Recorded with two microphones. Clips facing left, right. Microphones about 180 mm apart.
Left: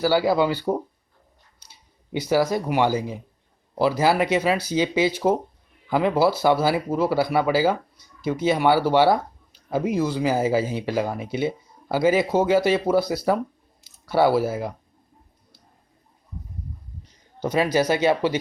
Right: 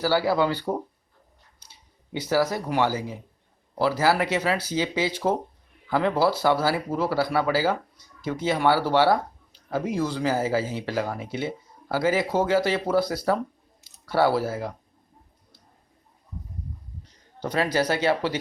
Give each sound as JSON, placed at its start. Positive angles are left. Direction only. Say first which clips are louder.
{"t": 0.0, "sound": "speech", "louder": "left 3 dB", "side_deg": 15}
{"t": 2.1, "sound": "speech", "louder": "left 3 dB", "side_deg": 10}
{"t": 17.4, "sound": "a man's voice", "louder": "left 3 dB", "side_deg": 15}